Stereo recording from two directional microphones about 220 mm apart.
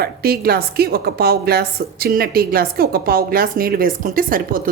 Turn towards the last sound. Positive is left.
turn(degrees=-40)  # may be behind; listen again after turning